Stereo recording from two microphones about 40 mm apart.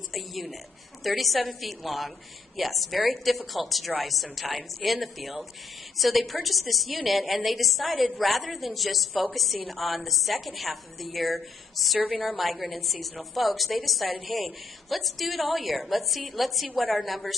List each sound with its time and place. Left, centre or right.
0.1 s a sound: centre
1.0 s a woman's voice: centre
12.0 s a woman's voice: right
12.5 s a woman's voice: centre